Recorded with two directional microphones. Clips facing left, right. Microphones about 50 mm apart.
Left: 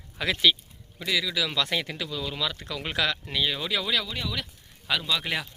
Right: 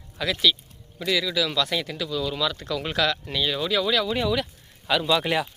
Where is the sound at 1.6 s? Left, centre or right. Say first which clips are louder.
Right 2 dB; left; by 4.1 s centre.